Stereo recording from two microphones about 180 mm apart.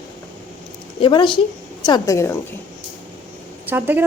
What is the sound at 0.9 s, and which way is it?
A woman's voice, 25° left (ahead or behind).